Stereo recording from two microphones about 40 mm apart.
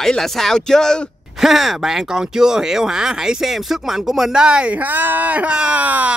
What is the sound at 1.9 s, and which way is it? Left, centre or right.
Speech, centre.